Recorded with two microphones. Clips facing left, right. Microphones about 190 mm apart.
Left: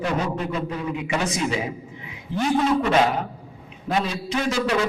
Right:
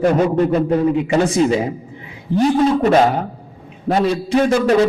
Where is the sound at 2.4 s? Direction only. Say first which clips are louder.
Right 6 dB; 40° right (ahead or behind).